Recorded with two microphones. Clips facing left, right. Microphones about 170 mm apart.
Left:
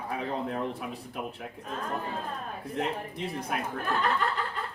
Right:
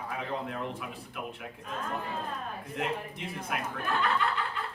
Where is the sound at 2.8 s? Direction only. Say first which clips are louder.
Left 2 dB; 35° left (ahead or behind).